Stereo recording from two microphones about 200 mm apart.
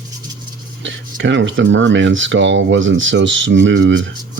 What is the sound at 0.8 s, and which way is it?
Speech, 65° right (ahead or behind).